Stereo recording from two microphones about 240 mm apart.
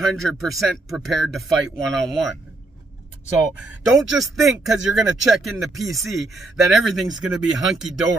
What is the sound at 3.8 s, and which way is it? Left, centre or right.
Speech, centre.